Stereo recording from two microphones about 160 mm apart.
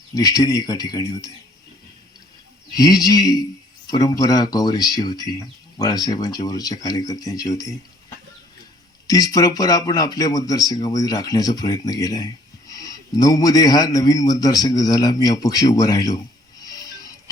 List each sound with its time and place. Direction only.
0.1 s speech: 25° left (ahead or behind)
2.7 s speech: 20° left (ahead or behind)
9.0 s speech: 20° left (ahead or behind)
16.6 s music: 25° left (ahead or behind)